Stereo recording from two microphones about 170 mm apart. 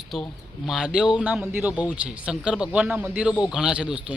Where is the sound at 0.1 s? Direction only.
Centre (ahead or behind).